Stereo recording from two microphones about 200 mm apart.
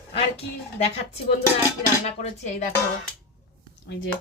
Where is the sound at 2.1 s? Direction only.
35° left (ahead or behind).